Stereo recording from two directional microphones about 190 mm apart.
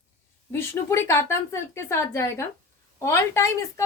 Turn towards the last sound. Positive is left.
turn(degrees=15)  # may be behind; listen again after turning